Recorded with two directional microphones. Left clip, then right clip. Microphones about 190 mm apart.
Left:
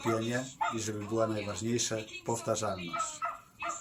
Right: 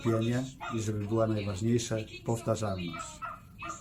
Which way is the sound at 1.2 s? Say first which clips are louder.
Right 1 dB; 10° left (ahead or behind).